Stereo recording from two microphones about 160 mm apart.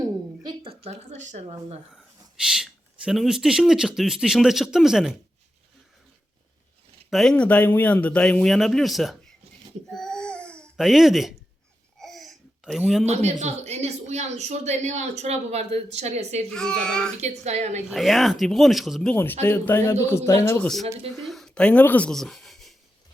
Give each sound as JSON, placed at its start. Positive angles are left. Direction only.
{"t": 0.4, "sound": "a sound", "side_deg": -35}
{"t": 1.9, "sound": "speech", "side_deg": -5}
{"t": 7.1, "sound": "speech", "side_deg": 5}
{"t": 9.9, "sound": "babbling", "side_deg": 5}
{"t": 11.9, "sound": "a sound", "side_deg": 0}
{"t": 13.1, "sound": "speech", "side_deg": -45}
{"t": 16.5, "sound": "speech", "side_deg": 5}
{"t": 17.2, "sound": "speech", "side_deg": -45}
{"t": 17.9, "sound": "speech", "side_deg": 0}
{"t": 19.1, "sound": "speech", "side_deg": 10}
{"t": 21.2, "sound": "speech", "side_deg": 0}